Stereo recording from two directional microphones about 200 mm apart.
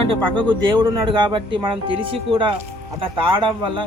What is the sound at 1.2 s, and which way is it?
Speech, 25° right (ahead or behind).